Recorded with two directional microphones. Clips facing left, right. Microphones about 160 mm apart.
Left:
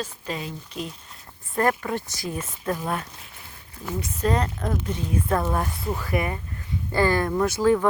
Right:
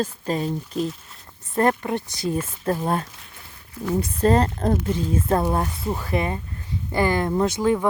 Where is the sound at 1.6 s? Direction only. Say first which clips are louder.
Right 3 dB; 25° right (ahead or behind).